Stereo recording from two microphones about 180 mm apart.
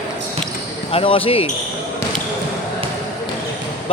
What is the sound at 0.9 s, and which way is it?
Speech, 30° left (ahead or behind).